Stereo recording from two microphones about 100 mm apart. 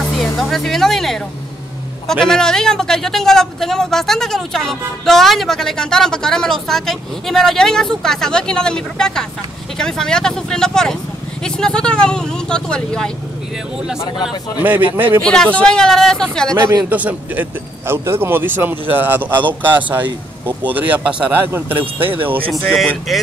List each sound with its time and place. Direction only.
0.2 s speech: centre (ahead or behind)
14.6 s a man's voice: 20° right (ahead or behind)
15.2 s speech: 10° left (ahead or behind)
16.5 s speech: 40° right (ahead or behind)
16.9 s speech: 15° right (ahead or behind)
20.4 s speech: 15° right (ahead or behind)
23.1 s speech: centre (ahead or behind)